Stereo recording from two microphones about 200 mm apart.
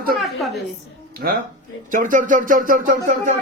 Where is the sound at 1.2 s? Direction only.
45° right (ahead or behind).